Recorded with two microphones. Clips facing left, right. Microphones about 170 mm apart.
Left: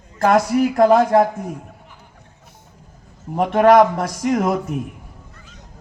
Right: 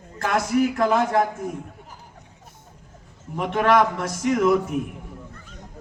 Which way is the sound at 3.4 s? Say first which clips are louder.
Left 7 dB; 45° left (ahead or behind).